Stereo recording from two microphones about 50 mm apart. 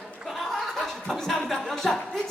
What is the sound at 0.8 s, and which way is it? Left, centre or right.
Music, centre.